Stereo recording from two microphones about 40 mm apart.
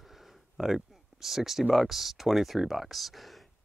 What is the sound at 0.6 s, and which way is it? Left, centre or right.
Speech, centre.